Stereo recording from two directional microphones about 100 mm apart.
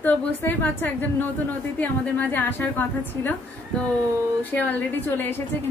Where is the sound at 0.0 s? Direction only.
20° left (ahead or behind).